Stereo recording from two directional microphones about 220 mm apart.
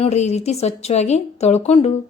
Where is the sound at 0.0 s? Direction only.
30° left (ahead or behind).